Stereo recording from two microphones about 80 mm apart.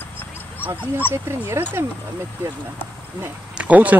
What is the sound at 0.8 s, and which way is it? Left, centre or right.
Speech, left.